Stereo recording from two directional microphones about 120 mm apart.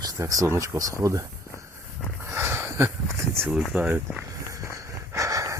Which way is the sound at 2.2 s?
20° right (ahead or behind).